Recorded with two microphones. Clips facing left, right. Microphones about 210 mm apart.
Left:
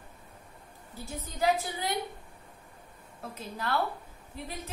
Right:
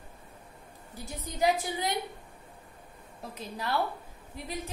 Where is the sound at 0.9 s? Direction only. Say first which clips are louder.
Even; 15° right (ahead or behind).